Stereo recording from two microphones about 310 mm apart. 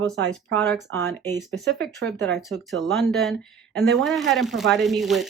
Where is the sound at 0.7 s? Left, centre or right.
Centre.